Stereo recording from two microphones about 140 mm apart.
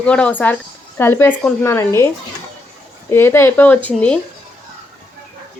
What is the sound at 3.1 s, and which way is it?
Speech, 15° left (ahead or behind).